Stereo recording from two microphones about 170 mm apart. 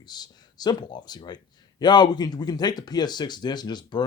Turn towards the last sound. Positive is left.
turn(degrees=25)  # may be behind; listen again after turning